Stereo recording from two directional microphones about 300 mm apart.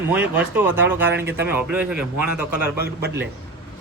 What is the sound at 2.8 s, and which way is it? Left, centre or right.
Speech, right.